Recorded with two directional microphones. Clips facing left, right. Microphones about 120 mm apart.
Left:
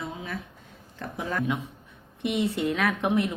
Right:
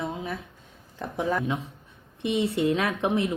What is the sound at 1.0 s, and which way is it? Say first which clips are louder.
Speech: right 4 dB; 15° right (ahead or behind).